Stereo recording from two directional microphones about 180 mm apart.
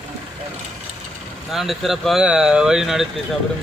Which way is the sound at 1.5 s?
Centre (ahead or behind).